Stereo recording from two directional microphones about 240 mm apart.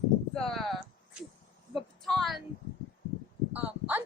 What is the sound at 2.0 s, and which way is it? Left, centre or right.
Speech, centre.